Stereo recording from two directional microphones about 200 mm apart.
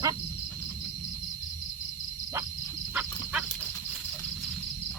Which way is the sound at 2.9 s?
5° right (ahead or behind).